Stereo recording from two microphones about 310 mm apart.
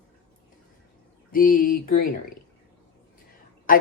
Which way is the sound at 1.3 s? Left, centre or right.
Left.